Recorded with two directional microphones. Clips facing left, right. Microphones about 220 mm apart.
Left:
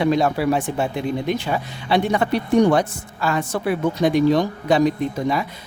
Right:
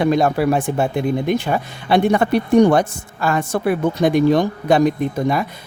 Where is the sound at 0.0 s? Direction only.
50° right (ahead or behind).